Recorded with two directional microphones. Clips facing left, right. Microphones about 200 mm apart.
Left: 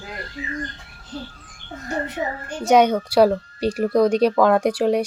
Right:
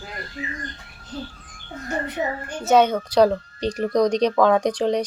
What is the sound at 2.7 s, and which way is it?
Speech, 10° left (ahead or behind).